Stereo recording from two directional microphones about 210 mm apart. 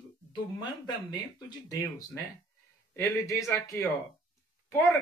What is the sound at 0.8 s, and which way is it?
Speech, 20° left (ahead or behind).